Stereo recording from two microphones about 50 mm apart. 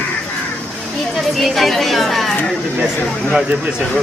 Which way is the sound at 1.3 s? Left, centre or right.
Centre.